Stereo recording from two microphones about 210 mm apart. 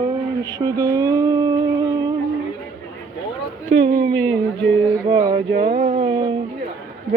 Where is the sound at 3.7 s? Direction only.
65° right (ahead or behind).